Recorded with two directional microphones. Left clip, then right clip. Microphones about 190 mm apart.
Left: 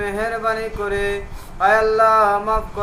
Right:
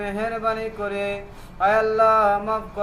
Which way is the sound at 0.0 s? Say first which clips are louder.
Left 3 dB; 20° right (ahead or behind).